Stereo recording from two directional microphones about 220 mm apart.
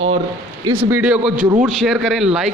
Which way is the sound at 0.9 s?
5° right (ahead or behind).